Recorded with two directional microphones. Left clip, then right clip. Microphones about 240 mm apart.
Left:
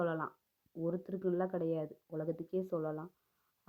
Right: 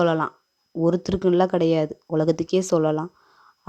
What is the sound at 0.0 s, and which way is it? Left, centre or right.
Speech, right.